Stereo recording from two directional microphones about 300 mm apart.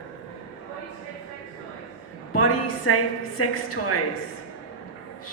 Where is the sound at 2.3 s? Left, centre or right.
Left.